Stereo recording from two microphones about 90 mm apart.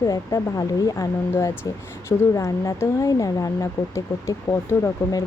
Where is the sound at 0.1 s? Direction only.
40° left (ahead or behind).